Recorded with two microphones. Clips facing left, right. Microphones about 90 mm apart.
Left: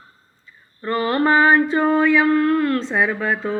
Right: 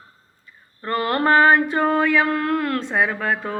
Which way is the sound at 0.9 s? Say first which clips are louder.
Left 1 dB; 55° right (ahead or behind).